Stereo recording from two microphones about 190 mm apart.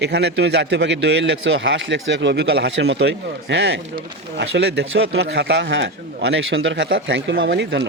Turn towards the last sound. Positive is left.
turn(degrees=-65)  # may be behind; listen again after turning